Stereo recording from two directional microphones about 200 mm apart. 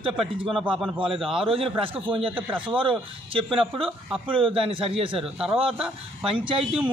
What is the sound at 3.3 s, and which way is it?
Speech, 30° right (ahead or behind).